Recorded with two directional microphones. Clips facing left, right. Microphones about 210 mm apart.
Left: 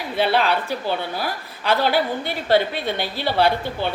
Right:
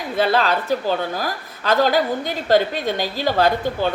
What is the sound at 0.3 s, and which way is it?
A woman's voice, 40° right (ahead or behind).